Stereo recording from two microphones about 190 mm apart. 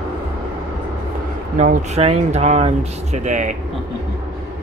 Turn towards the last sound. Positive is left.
turn(degrees=-40)  # may be behind; listen again after turning